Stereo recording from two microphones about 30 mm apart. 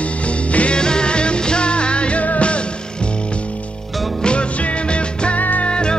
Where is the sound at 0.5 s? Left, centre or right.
Left.